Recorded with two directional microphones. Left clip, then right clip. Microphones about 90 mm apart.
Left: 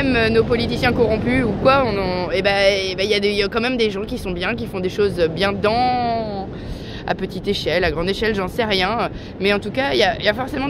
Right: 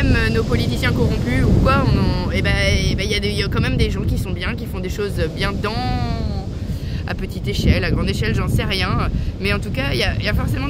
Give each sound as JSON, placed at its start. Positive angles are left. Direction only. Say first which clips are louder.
{"t": 0.0, "sound": "speech", "louder": "left 4 dB", "side_deg": -35}
{"t": 7.1, "sound": "speech", "louder": "left 6 dB", "side_deg": -30}